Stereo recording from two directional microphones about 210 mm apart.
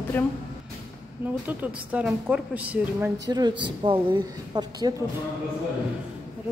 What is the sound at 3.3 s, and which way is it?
A woman's voice, 20° right (ahead or behind).